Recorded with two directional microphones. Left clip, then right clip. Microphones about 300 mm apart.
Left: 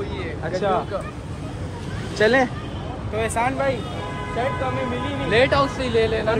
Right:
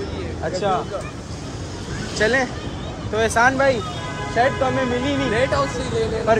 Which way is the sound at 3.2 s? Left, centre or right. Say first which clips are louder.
Right 6 dB; centre.